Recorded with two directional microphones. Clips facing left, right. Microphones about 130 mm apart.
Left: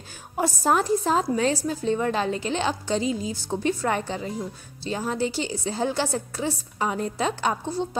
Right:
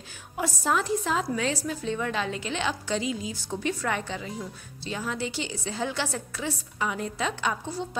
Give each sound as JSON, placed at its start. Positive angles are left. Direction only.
{"t": 0.4, "sound": "a woman's voice", "side_deg": 40}